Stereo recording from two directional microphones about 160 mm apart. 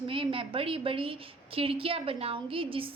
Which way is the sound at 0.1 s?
35° right (ahead or behind).